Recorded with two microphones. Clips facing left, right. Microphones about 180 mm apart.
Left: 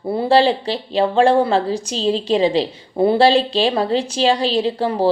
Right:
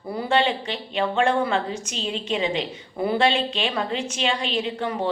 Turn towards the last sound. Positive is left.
turn(degrees=35)  # may be behind; listen again after turning